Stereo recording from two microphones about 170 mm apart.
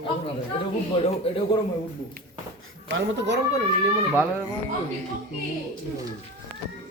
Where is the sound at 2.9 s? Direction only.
90° right.